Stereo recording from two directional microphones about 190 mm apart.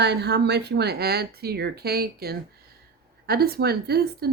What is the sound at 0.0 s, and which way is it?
Speech, 60° right (ahead or behind).